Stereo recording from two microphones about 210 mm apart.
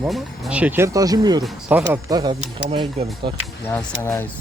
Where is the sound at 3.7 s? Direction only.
10° left (ahead or behind).